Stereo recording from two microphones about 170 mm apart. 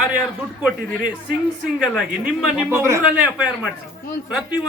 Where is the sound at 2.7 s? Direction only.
15° right (ahead or behind).